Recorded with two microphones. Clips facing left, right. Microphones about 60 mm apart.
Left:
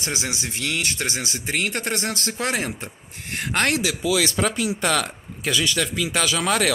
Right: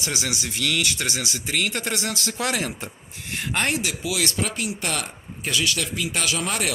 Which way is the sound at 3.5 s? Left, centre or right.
Left.